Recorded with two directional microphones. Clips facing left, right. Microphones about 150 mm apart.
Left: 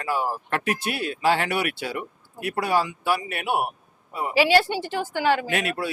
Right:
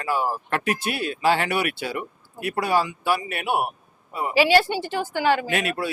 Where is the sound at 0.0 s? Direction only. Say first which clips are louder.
Right 1 dB; 10° right (ahead or behind).